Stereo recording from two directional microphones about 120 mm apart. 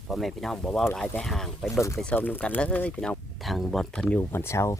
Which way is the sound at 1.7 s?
25° left (ahead or behind).